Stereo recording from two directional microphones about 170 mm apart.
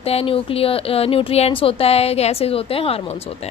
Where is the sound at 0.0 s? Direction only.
35° left (ahead or behind).